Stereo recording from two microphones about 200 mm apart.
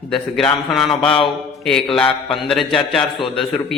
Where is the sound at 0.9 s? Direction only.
25° left (ahead or behind).